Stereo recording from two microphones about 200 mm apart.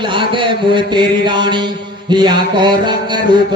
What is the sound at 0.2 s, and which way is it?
A man's voice, 25° right (ahead or behind).